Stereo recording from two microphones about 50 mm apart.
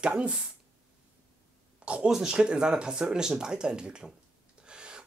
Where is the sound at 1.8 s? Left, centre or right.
Right.